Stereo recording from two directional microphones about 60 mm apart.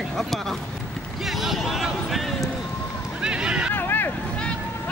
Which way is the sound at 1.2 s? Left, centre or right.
Centre.